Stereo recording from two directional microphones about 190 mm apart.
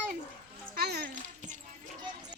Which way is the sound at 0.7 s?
55° right (ahead or behind).